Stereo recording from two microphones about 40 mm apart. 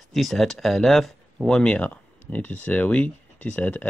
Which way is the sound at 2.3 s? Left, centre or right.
Left.